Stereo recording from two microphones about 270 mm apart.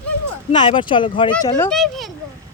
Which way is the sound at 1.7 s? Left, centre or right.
Centre.